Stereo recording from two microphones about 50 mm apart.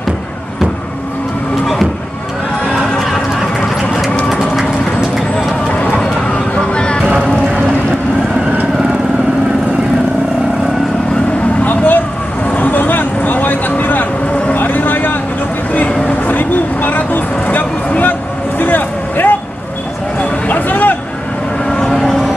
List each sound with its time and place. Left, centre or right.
4.3 s vehicle: centre
6.2 s a sound: centre
11.6 s a sound: left
12.5 s vehicle: left
20.4 s vehicle: left
21.6 s vehicle: centre
21.9 s vehicle: centre